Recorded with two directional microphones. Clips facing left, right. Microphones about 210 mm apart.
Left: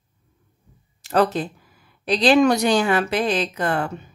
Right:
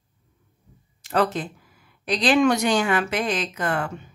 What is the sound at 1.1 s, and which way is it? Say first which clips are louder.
Speech: left 3 dB; 40° left (ahead or behind).